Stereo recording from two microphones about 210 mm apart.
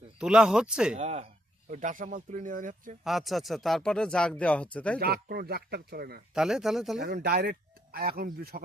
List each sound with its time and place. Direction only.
0.2 s speech: 5° right (ahead or behind)
0.9 s speech: 30° right (ahead or behind)
3.0 s speech: centre (ahead or behind)
4.9 s speech: 50° right (ahead or behind)
6.3 s speech: 5° right (ahead or behind)
7.0 s speech: 50° right (ahead or behind)